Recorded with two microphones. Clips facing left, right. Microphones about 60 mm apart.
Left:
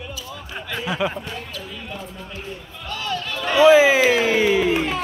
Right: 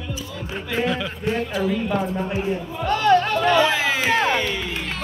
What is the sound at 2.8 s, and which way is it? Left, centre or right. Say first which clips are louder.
Speech: right 11 dB; right.